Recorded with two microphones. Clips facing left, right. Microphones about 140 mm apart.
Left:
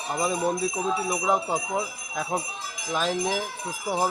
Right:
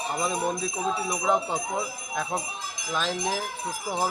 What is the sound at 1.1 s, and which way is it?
Speech, 5° left (ahead or behind).